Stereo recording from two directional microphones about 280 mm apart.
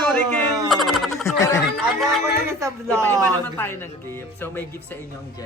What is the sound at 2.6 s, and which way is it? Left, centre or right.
Speech, centre.